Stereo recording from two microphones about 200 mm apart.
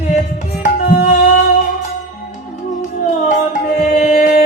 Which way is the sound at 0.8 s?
45° left (ahead or behind).